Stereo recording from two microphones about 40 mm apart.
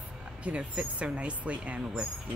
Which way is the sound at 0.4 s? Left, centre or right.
Right.